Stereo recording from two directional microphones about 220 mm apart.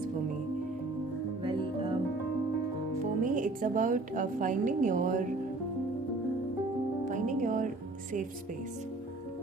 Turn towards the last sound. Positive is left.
turn(degrees=-35)  # may be behind; listen again after turning